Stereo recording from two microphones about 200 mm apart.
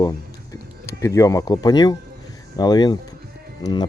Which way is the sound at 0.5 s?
15° left (ahead or behind).